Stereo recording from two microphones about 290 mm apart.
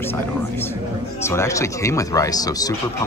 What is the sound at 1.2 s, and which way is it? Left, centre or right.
Speech, centre.